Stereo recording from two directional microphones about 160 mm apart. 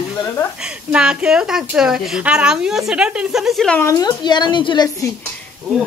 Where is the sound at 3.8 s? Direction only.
20° left (ahead or behind).